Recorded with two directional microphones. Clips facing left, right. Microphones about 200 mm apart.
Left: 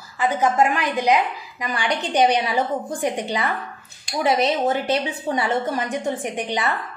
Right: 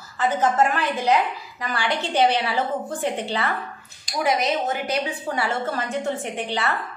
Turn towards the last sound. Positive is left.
turn(degrees=15)  # may be behind; listen again after turning